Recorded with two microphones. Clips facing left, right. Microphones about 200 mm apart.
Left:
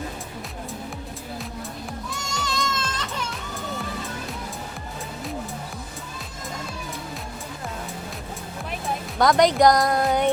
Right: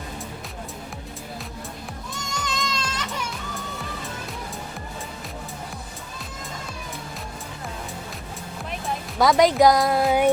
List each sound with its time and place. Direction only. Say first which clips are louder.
2.4 s music: left 1 dB; 20° right (ahead or behind)
9.1 s speech: right 1 dB; centre (ahead or behind)